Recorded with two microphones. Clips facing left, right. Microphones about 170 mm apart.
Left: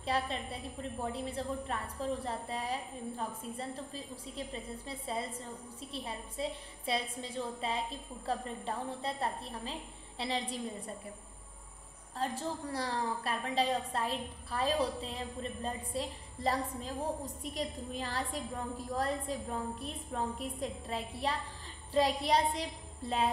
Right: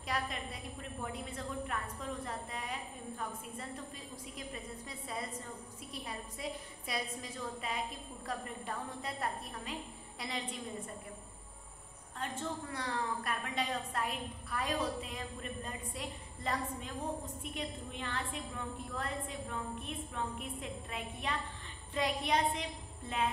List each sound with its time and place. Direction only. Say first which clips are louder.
0.0 s a woman's voice: left 4 dB; 30° left (ahead or behind)
12.2 s a woman's voice: left 3 dB; 35° left (ahead or behind)